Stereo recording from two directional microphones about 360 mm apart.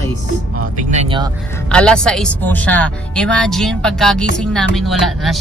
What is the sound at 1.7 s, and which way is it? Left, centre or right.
A woman's voice, centre.